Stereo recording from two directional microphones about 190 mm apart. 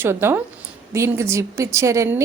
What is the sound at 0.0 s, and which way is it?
A woman's voice, 10° right (ahead or behind).